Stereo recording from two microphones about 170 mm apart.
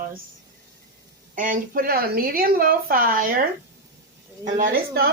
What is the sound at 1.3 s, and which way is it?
A woman's voice, 50° right (ahead or behind).